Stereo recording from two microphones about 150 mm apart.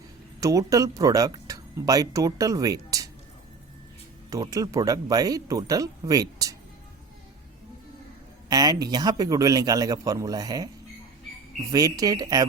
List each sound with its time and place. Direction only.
0.3 s speech: 20° right (ahead or behind)
4.3 s speech: 25° right (ahead or behind)
8.4 s speech: 25° right (ahead or behind)
11.7 s speech: 25° right (ahead or behind)